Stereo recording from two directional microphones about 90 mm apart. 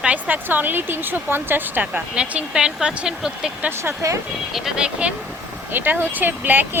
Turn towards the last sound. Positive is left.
turn(degrees=-20)  # may be behind; listen again after turning